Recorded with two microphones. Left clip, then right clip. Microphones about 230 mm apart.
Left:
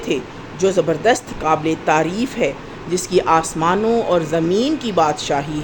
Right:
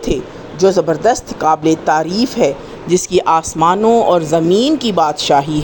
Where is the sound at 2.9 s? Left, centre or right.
Right.